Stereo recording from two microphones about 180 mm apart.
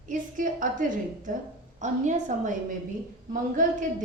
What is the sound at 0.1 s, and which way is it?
A woman's voice, 45° right (ahead or behind).